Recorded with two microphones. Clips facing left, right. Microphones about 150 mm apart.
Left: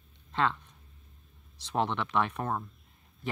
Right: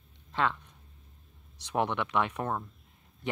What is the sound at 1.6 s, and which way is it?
Speech, 15° right (ahead or behind).